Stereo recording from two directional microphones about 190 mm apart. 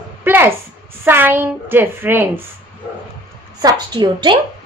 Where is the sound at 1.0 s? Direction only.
10° right (ahead or behind).